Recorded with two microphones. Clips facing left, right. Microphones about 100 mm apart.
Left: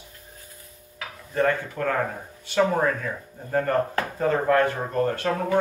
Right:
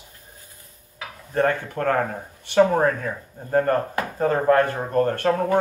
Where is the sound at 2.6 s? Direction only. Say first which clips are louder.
Right 4 dB; 40° right (ahead or behind).